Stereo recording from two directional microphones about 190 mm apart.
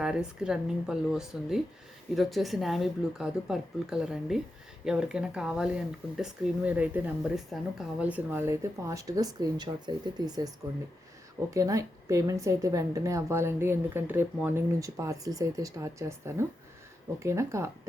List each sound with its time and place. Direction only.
0.0 s speech: 5° right (ahead or behind); by 10.5 s 20° right (ahead or behind)
11.5 s speech: 15° right (ahead or behind)